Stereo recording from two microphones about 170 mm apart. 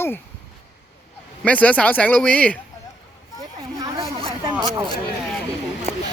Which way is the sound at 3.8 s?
25° right (ahead or behind).